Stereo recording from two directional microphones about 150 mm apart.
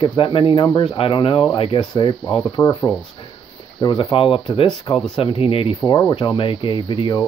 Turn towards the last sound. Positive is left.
turn(degrees=30)  # may be behind; listen again after turning